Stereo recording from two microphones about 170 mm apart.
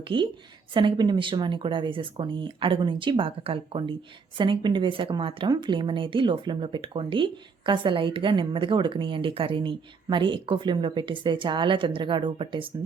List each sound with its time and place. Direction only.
0.1 s a woman's voice: 30° right (ahead or behind)